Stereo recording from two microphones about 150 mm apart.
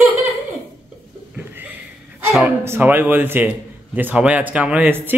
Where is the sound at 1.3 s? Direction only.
10° right (ahead or behind).